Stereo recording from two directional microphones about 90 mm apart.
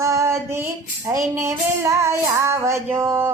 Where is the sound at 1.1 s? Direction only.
35° right (ahead or behind).